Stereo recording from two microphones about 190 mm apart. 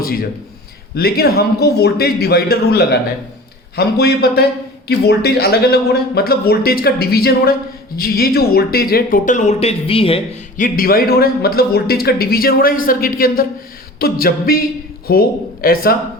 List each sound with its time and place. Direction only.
0.0 s a man's voice: 50° left (ahead or behind); by 10.2 s 30° left (ahead or behind)
10.6 s a man's voice: 50° left (ahead or behind)